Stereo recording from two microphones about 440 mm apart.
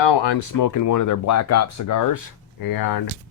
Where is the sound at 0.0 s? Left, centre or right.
Left.